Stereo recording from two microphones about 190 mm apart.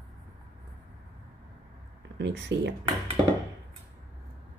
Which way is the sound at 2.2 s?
65° right (ahead or behind).